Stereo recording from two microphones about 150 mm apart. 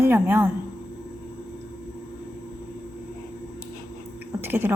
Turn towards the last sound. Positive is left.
turn(degrees=-15)  # may be behind; listen again after turning